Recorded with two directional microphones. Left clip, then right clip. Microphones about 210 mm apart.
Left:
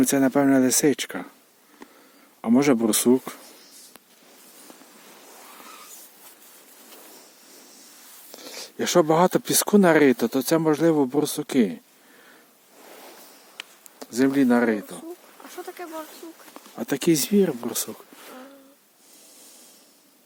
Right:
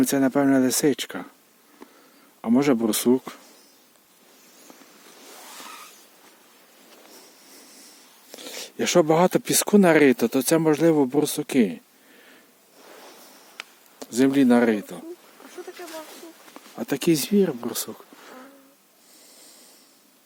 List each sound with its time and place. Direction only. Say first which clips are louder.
0.0 s speech: left 1 dB; 5° left (ahead or behind)
2.4 s speech: left 1 dB; 5° left (ahead or behind)
8.3 s speech: right 2 dB; 15° right (ahead or behind)
12.8 s waves: left 1 dB; 15° left (ahead or behind)
14.0 s speech: right 1 dB; 10° right (ahead or behind)
16.6 s speech: even; centre (ahead or behind)